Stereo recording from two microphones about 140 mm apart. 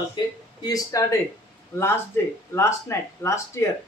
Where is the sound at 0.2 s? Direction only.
30° left (ahead or behind).